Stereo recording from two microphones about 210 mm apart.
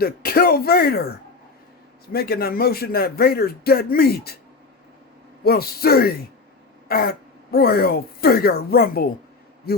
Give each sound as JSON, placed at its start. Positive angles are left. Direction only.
{"t": 0.0, "sound": "speech", "side_deg": 45}
{"t": 2.1, "sound": "speech", "side_deg": 45}
{"t": 5.4, "sound": "speech", "side_deg": 45}